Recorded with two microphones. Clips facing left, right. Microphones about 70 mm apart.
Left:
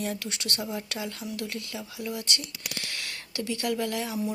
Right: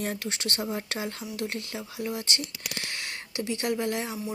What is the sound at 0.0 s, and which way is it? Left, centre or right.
A woman's voice, right.